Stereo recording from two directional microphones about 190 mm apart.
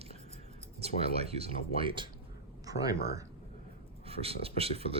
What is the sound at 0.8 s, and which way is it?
Speech, 30° right (ahead or behind).